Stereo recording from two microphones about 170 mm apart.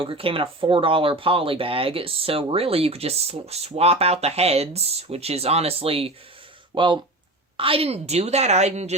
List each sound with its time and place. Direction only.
0.0 s speech: 30° right (ahead or behind)